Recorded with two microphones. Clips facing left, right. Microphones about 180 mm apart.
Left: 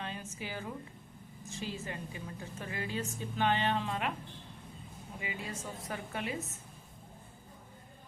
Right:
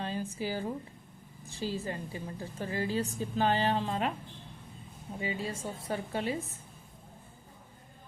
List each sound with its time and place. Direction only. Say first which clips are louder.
0.0 s a sound: right 7 dB; 35° right (ahead or behind)
1.5 s a woman's voice: right 5 dB; 35° right (ahead or behind)
5.2 s a woman's voice: right 6 dB; 30° right (ahead or behind)